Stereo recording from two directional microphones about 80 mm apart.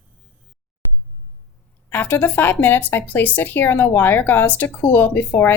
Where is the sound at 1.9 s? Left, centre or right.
Left.